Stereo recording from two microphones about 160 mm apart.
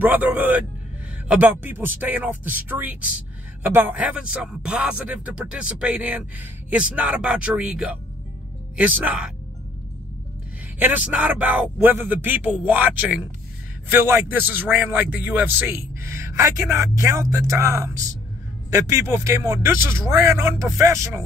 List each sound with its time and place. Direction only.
0.0 s speech: 10° right (ahead or behind)
10.8 s speech: 10° right (ahead or behind)